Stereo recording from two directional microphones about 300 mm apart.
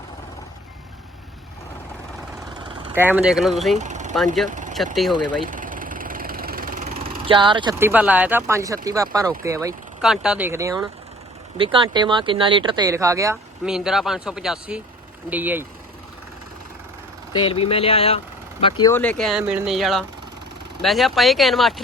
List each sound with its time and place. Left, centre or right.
2.6 s speech: centre
3.8 s vehicle: right
4.4 s speech: right
5.5 s vehicle: right; by 9.3 s centre
9.4 s speech: centre
17.3 s speech: centre